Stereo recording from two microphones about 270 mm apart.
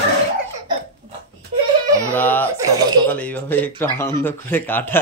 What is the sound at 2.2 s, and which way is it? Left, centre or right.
Speech, centre.